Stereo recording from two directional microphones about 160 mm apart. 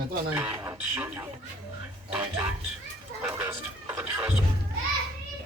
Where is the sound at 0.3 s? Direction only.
10° right (ahead or behind).